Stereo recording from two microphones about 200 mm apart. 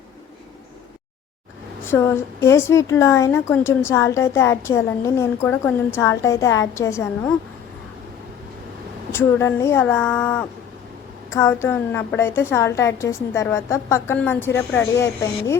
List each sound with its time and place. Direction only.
1.9 s a woman's voice: 15° left (ahead or behind)
9.1 s a woman's voice: 10° left (ahead or behind)